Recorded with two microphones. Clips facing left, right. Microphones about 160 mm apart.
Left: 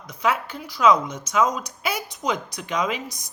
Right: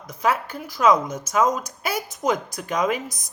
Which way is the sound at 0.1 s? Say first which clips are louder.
Right 1 dB; 45° right (ahead or behind).